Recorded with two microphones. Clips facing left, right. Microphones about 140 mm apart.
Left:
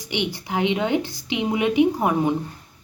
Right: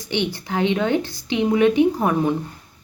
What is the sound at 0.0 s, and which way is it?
A woman's voice, 15° left (ahead or behind).